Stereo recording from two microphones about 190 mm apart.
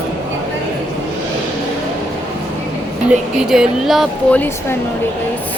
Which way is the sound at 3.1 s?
5° right (ahead or behind).